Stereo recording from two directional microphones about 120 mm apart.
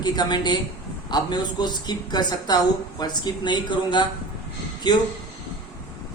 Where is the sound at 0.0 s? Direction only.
35° left (ahead or behind).